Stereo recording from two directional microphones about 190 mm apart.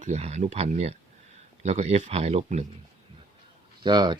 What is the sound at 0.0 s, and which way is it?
Speech, 35° right (ahead or behind).